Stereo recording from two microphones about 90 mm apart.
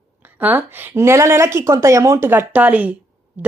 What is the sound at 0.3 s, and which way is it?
Speech, 20° right (ahead or behind).